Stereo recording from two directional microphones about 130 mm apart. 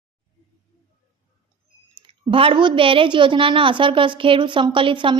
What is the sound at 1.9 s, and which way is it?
A woman's voice, 40° right (ahead or behind).